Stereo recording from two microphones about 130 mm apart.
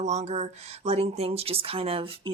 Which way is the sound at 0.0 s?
60° right (ahead or behind).